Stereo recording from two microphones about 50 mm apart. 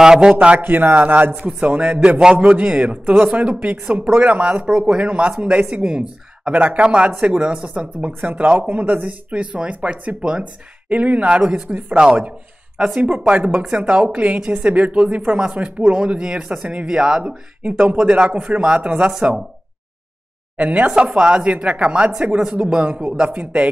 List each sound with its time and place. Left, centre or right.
0.0 s speech: centre
0.6 s speech: right
8.2 s speech: right; by 14.0 s centre
14.0 s speech: right
17.3 s speech: right
20.5 s speech: right